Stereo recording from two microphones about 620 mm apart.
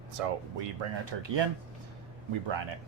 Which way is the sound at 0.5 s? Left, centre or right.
Right.